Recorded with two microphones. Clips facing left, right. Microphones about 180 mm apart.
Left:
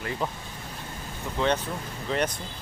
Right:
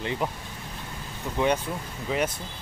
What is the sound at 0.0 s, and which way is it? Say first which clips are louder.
Speech: right 2 dB; 20° right (ahead or behind).